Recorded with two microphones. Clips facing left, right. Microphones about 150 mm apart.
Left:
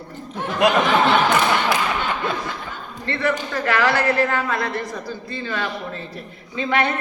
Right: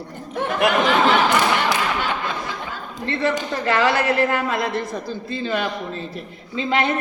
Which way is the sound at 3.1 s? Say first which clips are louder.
Right 1 dB; 20° right (ahead or behind).